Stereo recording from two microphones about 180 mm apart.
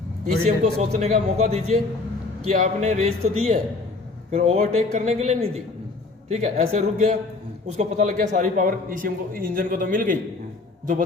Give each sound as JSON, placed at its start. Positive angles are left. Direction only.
{"t": 0.4, "sound": "speech", "side_deg": -40}
{"t": 4.4, "sound": "speech", "side_deg": -50}
{"t": 4.9, "sound": "speech", "side_deg": -40}